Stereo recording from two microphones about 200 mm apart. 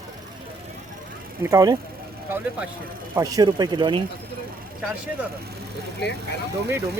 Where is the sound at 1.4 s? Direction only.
15° right (ahead or behind).